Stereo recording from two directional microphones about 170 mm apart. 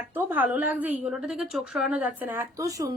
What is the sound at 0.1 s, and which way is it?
A woman's voice, 10° right (ahead or behind).